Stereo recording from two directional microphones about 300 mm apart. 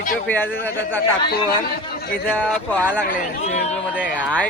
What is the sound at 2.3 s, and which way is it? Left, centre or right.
Speech, centre.